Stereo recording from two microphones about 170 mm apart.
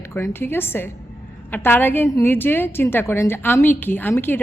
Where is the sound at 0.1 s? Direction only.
15° left (ahead or behind).